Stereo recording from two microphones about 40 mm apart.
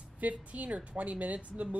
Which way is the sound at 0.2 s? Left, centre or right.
Right.